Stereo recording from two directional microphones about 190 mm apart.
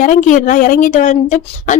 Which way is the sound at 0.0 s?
40° left (ahead or behind).